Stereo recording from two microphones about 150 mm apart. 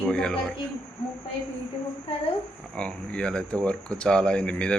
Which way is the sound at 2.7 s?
5° left (ahead or behind).